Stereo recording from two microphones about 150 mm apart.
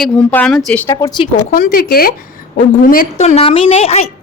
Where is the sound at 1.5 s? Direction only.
65° left (ahead or behind).